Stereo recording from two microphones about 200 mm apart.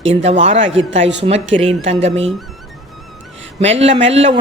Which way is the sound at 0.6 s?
70° right (ahead or behind).